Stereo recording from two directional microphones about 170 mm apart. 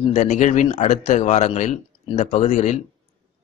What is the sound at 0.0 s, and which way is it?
A man's voice, 35° left (ahead or behind).